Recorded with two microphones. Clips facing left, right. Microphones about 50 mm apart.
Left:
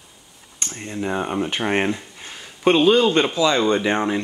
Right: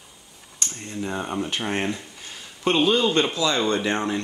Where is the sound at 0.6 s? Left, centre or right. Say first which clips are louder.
Left 4 dB; left.